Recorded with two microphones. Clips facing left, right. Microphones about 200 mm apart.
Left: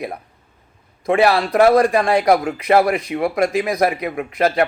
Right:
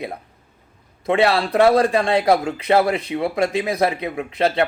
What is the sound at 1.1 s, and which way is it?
Speech, 25° right (ahead or behind).